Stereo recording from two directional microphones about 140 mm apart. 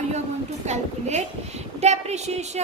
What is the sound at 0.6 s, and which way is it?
A woman's voice, 55° right (ahead or behind).